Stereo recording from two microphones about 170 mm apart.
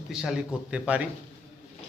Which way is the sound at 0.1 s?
5° right (ahead or behind).